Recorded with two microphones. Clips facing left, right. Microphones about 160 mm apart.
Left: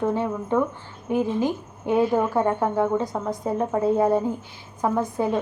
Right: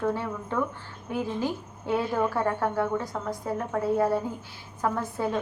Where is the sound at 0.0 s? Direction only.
20° left (ahead or behind).